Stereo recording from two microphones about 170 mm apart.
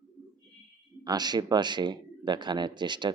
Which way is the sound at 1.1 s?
25° right (ahead or behind).